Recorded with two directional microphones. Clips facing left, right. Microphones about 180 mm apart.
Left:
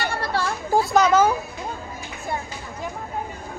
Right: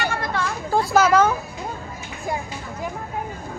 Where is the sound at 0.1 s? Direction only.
35° left (ahead or behind).